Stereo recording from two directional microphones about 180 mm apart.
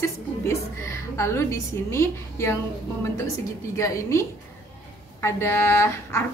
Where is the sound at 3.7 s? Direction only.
15° left (ahead or behind).